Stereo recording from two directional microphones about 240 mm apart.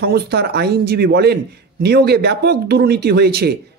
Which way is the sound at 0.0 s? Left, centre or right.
Right.